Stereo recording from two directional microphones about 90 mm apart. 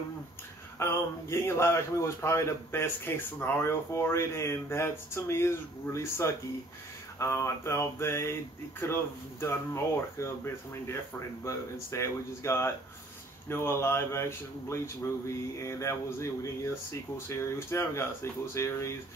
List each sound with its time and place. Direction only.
0.7 s speech: 30° left (ahead or behind)